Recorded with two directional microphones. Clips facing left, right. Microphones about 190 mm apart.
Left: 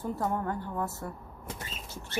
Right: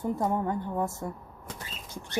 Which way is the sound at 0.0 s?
15° right (ahead or behind).